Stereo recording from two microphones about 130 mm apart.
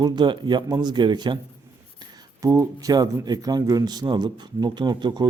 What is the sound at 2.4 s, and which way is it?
A man's voice, 25° right (ahead or behind).